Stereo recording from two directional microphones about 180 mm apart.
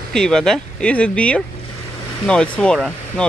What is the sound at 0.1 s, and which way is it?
Speech, 5° left (ahead or behind).